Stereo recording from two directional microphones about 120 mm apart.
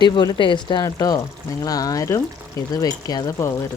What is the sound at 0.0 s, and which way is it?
Speech, 35° left (ahead or behind).